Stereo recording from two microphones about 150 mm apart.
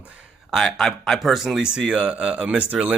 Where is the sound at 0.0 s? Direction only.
5° right (ahead or behind).